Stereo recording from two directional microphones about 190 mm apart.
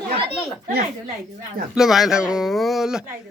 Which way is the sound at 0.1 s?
55° right (ahead or behind).